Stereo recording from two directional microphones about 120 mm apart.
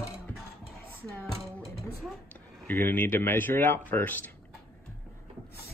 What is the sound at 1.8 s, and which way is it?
Speech, 5° left (ahead or behind).